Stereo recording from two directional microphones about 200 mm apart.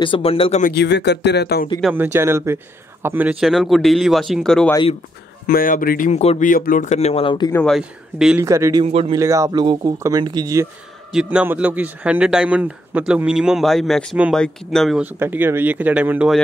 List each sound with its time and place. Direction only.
0.0 s speech: 25° left (ahead or behind)
0.7 s speech: 60° left (ahead or behind)
1.8 s speech: 5° right (ahead or behind)
5.5 s speech: 45° left (ahead or behind); by 7.5 s 25° left (ahead or behind)
7.5 s speech: centre (ahead or behind)
8.5 s speech: 15° right (ahead or behind)
11.1 s speech: 5° right (ahead or behind)